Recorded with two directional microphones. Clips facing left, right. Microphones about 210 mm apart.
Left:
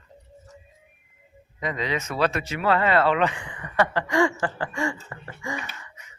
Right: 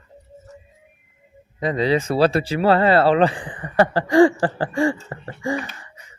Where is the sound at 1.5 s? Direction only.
35° right (ahead or behind).